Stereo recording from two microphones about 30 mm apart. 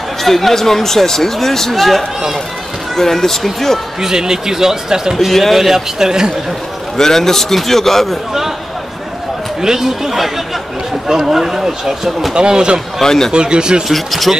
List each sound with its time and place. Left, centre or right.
0.2 s speech: centre
4.0 s speech: centre
5.3 s speech: centre
5.9 s speech: centre
7.0 s speech: centre
9.6 s speech: centre
12.4 s speech: right
13.0 s speech: centre
13.3 s speech: right
13.8 s speech: centre